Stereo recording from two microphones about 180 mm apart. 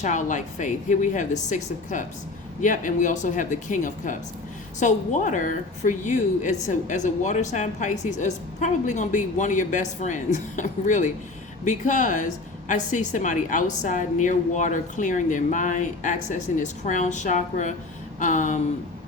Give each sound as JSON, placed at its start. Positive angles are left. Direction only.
{"t": 0.0, "sound": "a woman's voice", "side_deg": 45}